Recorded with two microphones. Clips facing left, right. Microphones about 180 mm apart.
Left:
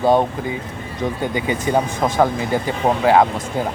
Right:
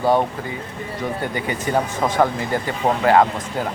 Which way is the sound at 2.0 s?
10° left (ahead or behind).